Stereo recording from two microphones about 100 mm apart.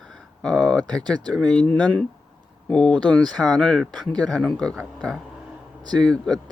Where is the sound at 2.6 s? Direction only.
10° left (ahead or behind).